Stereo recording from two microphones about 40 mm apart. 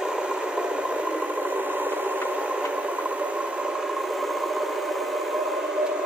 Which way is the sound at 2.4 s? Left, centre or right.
Right.